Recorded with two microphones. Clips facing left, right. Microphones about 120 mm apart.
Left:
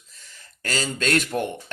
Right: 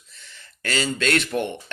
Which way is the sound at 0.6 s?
40° left (ahead or behind).